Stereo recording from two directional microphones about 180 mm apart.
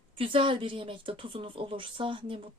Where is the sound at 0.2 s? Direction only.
30° right (ahead or behind).